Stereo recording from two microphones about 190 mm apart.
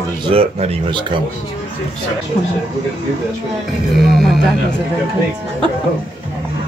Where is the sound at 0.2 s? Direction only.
30° right (ahead or behind).